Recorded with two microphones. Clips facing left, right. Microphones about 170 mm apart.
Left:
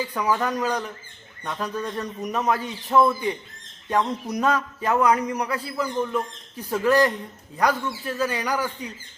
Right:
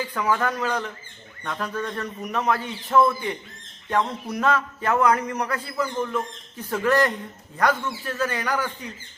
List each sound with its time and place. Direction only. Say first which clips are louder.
0.1 s a man's voice: right 2 dB; 15° left (ahead or behind)